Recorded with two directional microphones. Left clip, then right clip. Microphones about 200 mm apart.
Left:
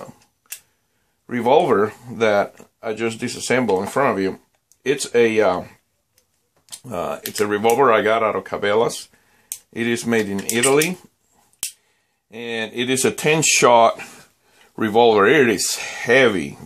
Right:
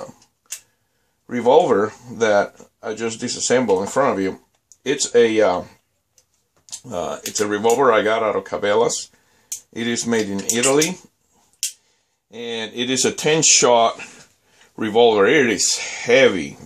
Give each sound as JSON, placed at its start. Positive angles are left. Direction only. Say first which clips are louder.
{"t": 1.2, "sound": "speech", "louder": "right 1 dB", "side_deg": 25}
{"t": 6.9, "sound": "speech", "louder": "even", "side_deg": 25}
{"t": 12.3, "sound": "speech", "louder": "left 1 dB", "side_deg": 30}